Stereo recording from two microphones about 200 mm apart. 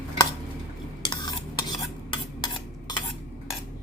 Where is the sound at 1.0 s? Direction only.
20° left (ahead or behind).